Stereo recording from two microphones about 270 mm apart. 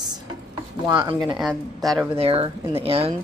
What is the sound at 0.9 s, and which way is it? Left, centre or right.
Speech, centre.